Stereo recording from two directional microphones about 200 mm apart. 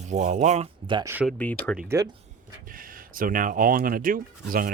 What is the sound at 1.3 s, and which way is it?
Speech, 5° left (ahead or behind).